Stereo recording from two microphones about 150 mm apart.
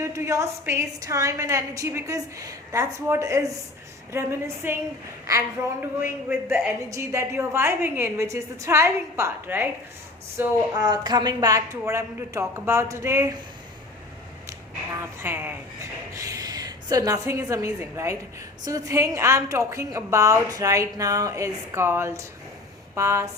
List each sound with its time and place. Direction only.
0.0 s a woman's voice: 20° right (ahead or behind)
6.9 s a woman's voice: 20° right (ahead or behind)
10.8 s a woman's voice: 25° right (ahead or behind)
14.9 s a woman's voice: 15° right (ahead or behind)